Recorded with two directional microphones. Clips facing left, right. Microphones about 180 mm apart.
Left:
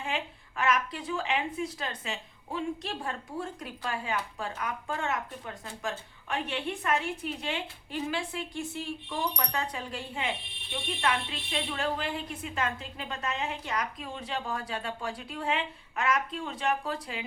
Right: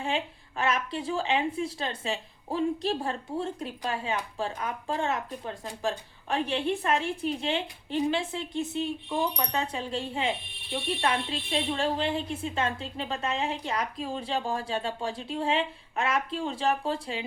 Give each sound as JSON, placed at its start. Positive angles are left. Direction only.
{"t": 0.0, "sound": "a woman's voice", "side_deg": -30}